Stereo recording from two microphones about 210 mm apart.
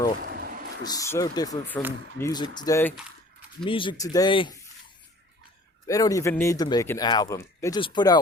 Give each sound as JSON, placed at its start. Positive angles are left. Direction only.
{"t": 0.2, "sound": "a sound", "side_deg": -45}
{"t": 0.9, "sound": "speech", "side_deg": 15}
{"t": 5.9, "sound": "speech", "side_deg": 15}